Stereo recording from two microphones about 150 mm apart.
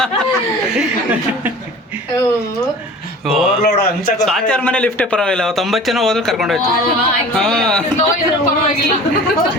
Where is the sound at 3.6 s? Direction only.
90° left.